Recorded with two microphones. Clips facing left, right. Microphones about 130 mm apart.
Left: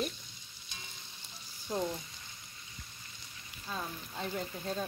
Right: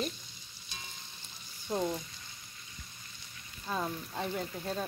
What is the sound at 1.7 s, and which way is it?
Frying, 10° right (ahead or behind).